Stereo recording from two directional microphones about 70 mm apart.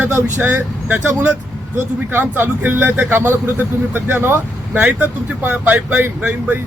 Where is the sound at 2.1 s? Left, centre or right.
Right.